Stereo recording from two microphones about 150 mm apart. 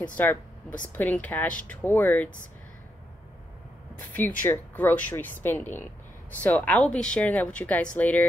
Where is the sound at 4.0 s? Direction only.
10° left (ahead or behind).